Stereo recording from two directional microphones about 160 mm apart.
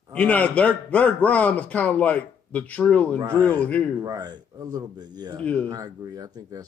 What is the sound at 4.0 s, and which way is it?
Speech, 25° right (ahead or behind).